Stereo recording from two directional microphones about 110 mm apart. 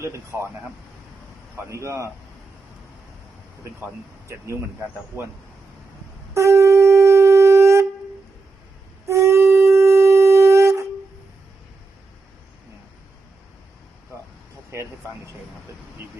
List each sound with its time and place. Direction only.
0.0 s speech: 25° right (ahead or behind)
1.7 s speech: 25° right (ahead or behind)
6.3 s shofar: 25° right (ahead or behind)
9.0 s wind instrument: 25° right (ahead or behind)